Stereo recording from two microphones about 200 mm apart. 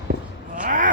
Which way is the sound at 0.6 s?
40° right (ahead or behind).